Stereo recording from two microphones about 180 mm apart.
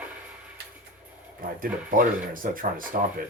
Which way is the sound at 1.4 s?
50° right (ahead or behind).